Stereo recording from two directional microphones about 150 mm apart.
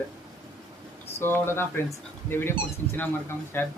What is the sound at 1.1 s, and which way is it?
Speech, 15° left (ahead or behind).